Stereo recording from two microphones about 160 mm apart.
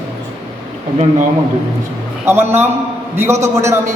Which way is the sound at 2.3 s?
15° right (ahead or behind).